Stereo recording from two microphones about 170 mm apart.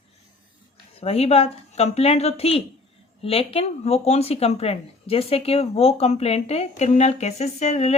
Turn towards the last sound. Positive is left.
turn(degrees=40)  # may be behind; listen again after turning